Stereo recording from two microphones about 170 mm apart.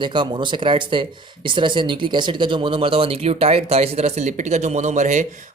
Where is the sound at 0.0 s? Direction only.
25° right (ahead or behind).